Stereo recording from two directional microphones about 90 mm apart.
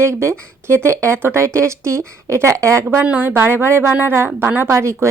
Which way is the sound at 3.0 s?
15° right (ahead or behind).